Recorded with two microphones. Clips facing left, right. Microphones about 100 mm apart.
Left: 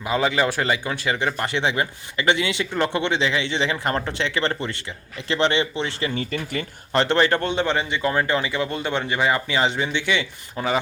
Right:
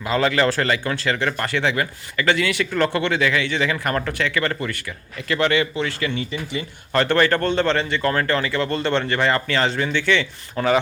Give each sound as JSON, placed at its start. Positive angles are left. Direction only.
{"t": 0.0, "sound": "speech", "side_deg": 15}
{"t": 6.1, "sound": "speech", "side_deg": 50}
{"t": 6.9, "sound": "a man's voice", "side_deg": 20}